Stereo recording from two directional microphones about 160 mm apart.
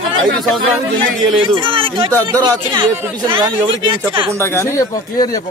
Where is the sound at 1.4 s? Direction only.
30° right (ahead or behind).